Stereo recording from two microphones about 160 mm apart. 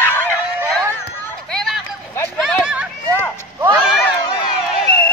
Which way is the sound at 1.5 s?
5° left (ahead or behind).